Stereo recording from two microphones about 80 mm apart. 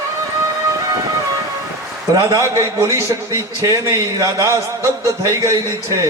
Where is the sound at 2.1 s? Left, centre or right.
Right.